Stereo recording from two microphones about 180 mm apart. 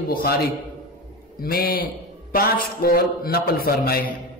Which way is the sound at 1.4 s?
55° left (ahead or behind).